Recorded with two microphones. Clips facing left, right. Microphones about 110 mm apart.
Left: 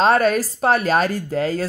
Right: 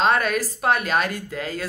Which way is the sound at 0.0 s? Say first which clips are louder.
Left 5 dB; 35° left (ahead or behind).